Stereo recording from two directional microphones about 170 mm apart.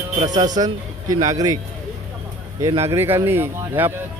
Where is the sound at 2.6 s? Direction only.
20° right (ahead or behind).